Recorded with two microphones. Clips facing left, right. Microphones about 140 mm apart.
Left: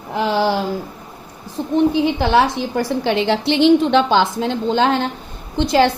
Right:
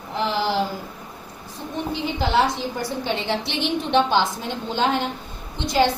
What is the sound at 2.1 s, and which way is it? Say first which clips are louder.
A woman's voice: left 5 dB; 70° left (ahead or behind).